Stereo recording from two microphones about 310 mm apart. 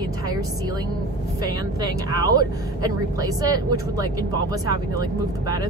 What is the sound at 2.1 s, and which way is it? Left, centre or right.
Speech, centre.